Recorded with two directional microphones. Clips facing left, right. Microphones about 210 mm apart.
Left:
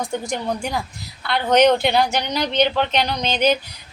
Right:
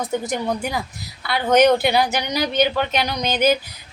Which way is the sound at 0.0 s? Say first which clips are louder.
Right 2 dB; 5° right (ahead or behind).